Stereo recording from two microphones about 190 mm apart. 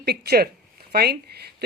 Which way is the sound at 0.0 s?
55° right (ahead or behind).